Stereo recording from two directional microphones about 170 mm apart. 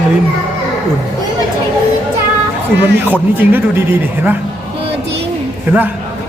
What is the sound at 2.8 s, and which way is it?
Speech, 10° right (ahead or behind).